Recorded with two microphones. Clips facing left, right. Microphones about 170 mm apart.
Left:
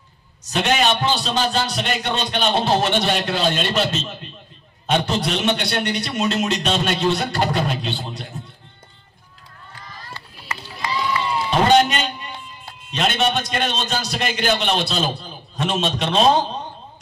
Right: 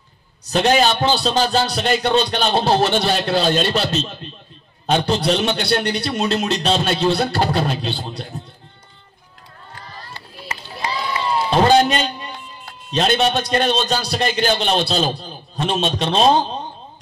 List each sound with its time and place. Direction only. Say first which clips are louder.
0.5 s a man's voice: right 3 dB; 35° right (ahead or behind)
10.5 s run: even; 30° right (ahead or behind)
12.9 s a man's voice: right 3 dB; 35° right (ahead or behind)